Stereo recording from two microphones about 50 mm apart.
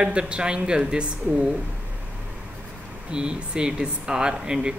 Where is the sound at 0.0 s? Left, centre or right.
Centre.